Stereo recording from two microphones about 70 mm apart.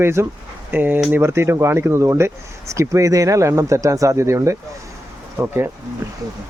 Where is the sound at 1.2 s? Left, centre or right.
Right.